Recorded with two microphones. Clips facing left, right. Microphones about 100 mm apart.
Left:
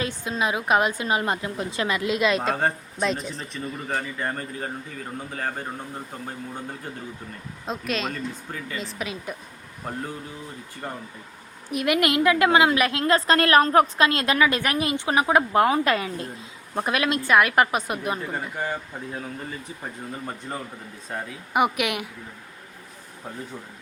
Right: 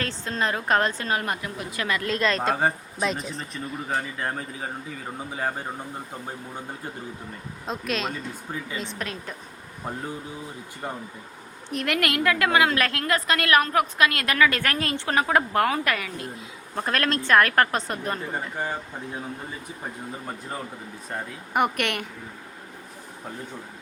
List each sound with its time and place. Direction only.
0.0 s a woman's voice: 10° left (ahead or behind); by 5.6 s 15° right (ahead or behind)
7.7 s speech: centre (ahead or behind)
10.8 s speech: 10° right (ahead or behind)
11.7 s a woman's voice: 15° left (ahead or behind); by 16.3 s 30° left (ahead or behind)
16.7 s a woman's voice: 15° left (ahead or behind)
18.3 s speech: 15° right (ahead or behind)
21.1 s speech: 5° left (ahead or behind)